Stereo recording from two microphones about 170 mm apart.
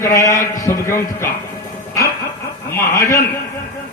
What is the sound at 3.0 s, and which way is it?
Speech, 20° left (ahead or behind).